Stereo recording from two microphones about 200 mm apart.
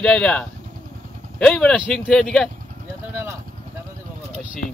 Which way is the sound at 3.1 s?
10° right (ahead or behind).